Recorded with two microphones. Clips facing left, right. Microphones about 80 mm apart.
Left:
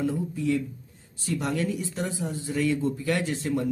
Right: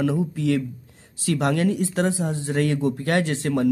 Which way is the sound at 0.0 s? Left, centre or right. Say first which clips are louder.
Right 4 dB; right.